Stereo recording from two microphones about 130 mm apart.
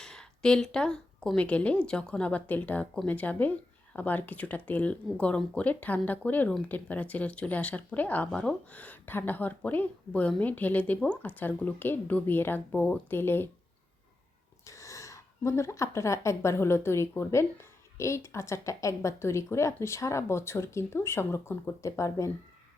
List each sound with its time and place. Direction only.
0.0 s speech: 5° left (ahead or behind)
14.6 s a sound: 25° left (ahead or behind)
16.0 s speech: 20° left (ahead or behind)